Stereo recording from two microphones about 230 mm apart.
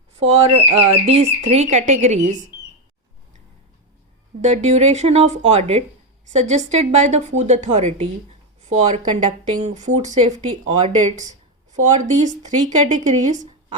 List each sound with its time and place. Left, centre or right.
0.1 s a woman's voice: right
4.4 s a woman's voice: right